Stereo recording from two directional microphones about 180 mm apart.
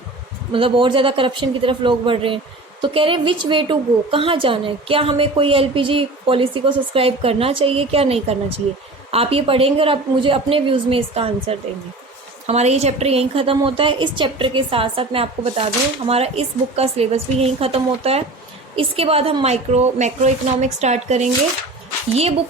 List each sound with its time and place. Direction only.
0.5 s a woman's voice: 30° right (ahead or behind)